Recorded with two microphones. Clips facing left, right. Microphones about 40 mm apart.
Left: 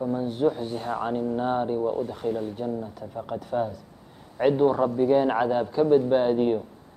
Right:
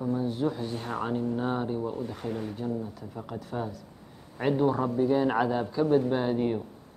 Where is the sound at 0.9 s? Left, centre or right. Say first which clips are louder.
Left 2 dB; centre.